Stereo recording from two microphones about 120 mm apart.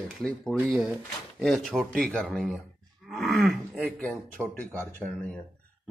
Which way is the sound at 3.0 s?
Centre (ahead or behind).